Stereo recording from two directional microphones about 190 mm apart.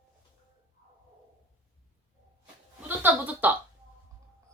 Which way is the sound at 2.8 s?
10° right (ahead or behind).